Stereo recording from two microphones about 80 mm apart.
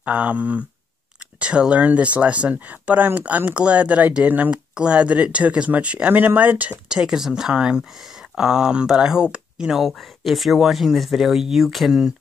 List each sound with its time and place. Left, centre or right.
0.0 s speech: centre
6.9 s speech: centre